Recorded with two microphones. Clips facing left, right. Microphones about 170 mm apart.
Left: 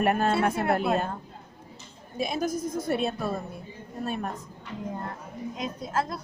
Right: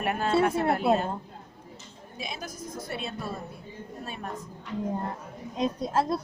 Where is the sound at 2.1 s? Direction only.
50° left (ahead or behind).